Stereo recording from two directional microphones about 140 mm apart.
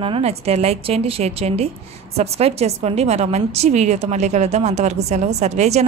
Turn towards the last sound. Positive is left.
turn(degrees=-50)  # may be behind; listen again after turning